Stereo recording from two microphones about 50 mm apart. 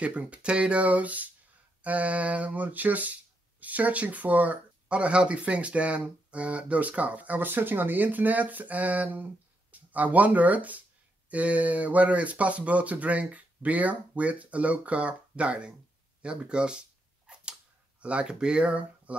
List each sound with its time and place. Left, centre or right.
0.0 s speech: right
7.3 s speech: right; by 16.8 s centre
18.0 s speech: right